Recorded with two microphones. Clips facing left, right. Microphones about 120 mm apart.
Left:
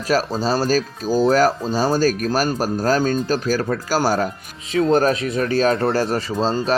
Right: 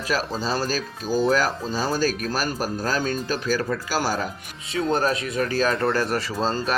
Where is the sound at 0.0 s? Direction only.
40° left (ahead or behind); by 6.7 s 20° left (ahead or behind).